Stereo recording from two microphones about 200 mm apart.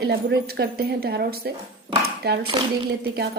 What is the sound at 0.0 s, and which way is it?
A woman's voice, 55° right (ahead or behind).